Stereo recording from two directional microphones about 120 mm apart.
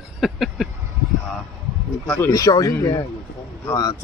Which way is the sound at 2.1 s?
30° left (ahead or behind).